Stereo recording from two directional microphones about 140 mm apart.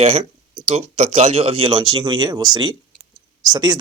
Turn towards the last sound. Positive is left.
turn(degrees=-30)  # may be behind; listen again after turning